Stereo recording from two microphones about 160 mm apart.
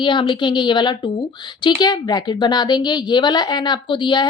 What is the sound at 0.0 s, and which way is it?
A woman's voice, 30° left (ahead or behind).